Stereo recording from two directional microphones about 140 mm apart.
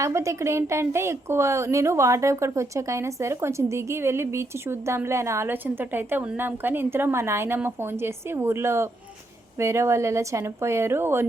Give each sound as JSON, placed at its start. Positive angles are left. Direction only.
{"t": 0.0, "sound": "a woman's voice", "side_deg": -20}